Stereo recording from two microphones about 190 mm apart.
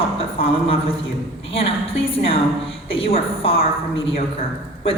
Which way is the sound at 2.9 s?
30° left (ahead or behind).